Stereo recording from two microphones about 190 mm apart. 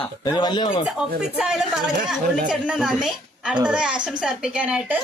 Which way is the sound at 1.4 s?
Centre (ahead or behind).